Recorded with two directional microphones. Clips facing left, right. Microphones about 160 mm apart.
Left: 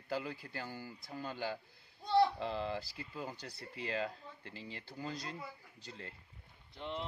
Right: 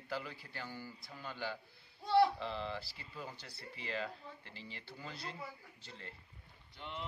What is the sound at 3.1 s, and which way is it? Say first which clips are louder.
Speech: left 3 dB; 35° left (ahead or behind).